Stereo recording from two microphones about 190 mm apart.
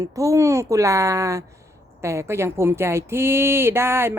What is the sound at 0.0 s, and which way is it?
Speech, 15° right (ahead or behind).